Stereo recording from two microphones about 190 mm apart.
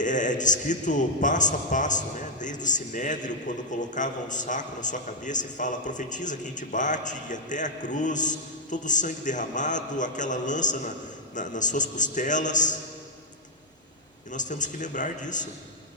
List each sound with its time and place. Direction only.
0.0 s a man's voice: 40° left (ahead or behind)
14.3 s a man's voice: 40° left (ahead or behind)